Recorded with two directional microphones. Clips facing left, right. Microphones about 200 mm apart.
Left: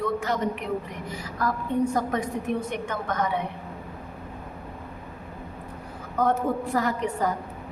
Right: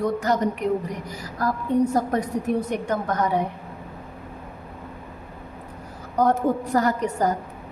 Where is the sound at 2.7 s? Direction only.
40° right (ahead or behind).